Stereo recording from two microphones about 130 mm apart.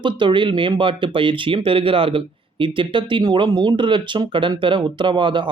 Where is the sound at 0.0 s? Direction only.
40° right (ahead or behind).